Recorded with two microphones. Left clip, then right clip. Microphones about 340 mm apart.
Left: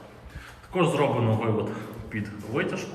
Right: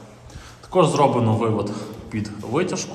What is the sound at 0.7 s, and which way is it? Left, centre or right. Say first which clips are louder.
A man's voice: right 7 dB; centre.